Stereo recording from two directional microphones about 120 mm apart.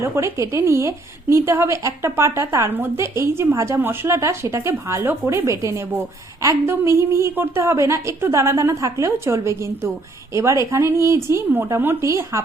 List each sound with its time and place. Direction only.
0.0 s a woman's voice: 25° right (ahead or behind)